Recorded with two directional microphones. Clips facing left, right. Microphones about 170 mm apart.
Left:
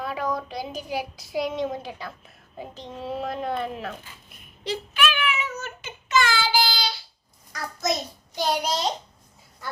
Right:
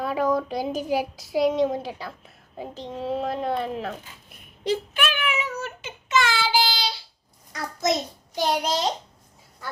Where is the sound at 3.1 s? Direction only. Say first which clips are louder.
Right 2 dB; 30° right (ahead or behind).